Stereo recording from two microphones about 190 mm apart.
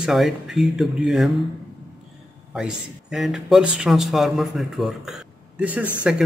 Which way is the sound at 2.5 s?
5° right (ahead or behind).